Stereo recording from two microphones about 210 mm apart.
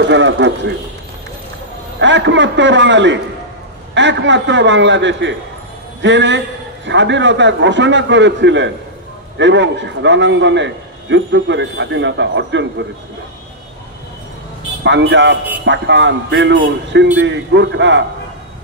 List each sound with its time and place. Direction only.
0.0 s a man's voice: 60° right (ahead or behind)
2.0 s a man's voice: 60° right (ahead or behind)
14.8 s a man's voice: 55° right (ahead or behind)